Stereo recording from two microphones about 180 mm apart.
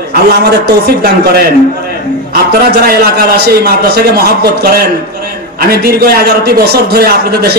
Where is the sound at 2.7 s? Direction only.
60° right (ahead or behind).